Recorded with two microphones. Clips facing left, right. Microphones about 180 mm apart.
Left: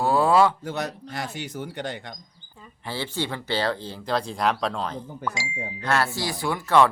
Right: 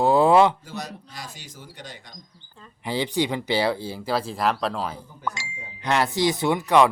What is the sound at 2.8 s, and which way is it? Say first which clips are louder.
Speech: right 5 dB; 15° right (ahead or behind).